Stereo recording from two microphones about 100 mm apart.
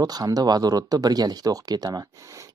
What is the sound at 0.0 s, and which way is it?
Speech, 40° right (ahead or behind).